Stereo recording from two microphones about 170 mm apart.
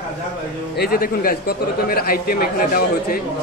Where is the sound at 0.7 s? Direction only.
60° left (ahead or behind).